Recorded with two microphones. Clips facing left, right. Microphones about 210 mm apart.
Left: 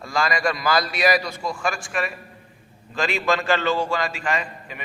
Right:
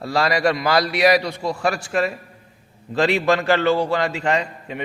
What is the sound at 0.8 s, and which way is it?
Speech, 65° right (ahead or behind).